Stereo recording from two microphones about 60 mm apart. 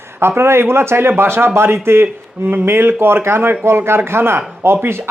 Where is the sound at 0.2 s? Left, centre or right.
Right.